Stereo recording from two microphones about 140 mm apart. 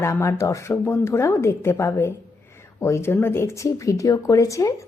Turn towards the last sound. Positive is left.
turn(degrees=20)  # may be behind; listen again after turning